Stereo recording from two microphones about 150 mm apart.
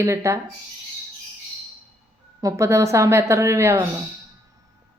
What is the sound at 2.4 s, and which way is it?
Speech, 20° right (ahead or behind).